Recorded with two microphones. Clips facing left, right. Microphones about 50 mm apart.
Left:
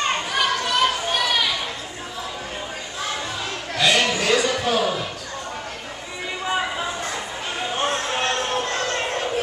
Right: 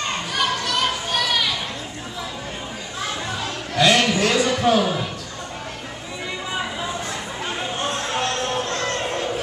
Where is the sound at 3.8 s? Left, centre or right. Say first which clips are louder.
Right 3 dB; centre.